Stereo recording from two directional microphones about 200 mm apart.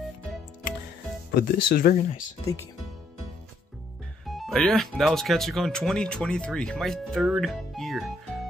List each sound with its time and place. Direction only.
1.3 s speech: 45° left (ahead or behind)
4.3 s speech: centre (ahead or behind)